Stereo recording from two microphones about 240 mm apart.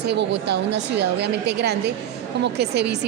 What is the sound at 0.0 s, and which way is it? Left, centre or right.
A woman's voice, right.